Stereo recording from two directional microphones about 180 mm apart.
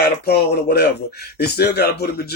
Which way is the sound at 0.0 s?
60° left (ahead or behind).